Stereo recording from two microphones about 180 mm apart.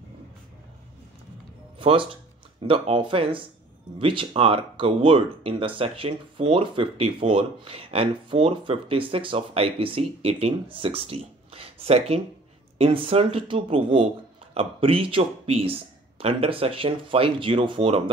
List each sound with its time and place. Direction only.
1.8 s speech: 30° right (ahead or behind)